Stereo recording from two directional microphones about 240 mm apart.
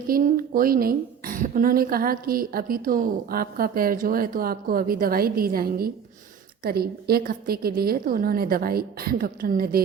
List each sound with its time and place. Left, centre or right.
0.1 s a woman's voice: right